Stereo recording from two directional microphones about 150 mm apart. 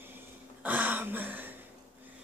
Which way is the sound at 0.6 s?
10° right (ahead or behind).